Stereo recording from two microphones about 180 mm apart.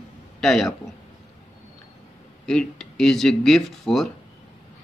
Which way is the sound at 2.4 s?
5° left (ahead or behind).